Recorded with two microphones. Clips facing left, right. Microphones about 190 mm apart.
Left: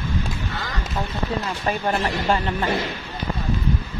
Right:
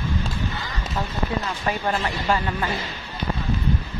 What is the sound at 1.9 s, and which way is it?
Speech, 20° left (ahead or behind).